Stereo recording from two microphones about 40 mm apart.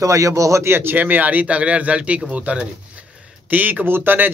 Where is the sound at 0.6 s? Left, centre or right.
Right.